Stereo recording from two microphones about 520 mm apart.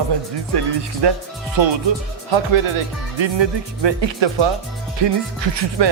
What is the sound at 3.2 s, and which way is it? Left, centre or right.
Speech, right.